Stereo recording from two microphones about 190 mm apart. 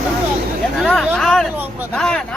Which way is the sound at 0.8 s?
5° left (ahead or behind).